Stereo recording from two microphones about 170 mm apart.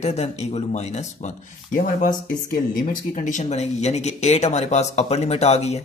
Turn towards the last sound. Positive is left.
turn(degrees=40)  # may be behind; listen again after turning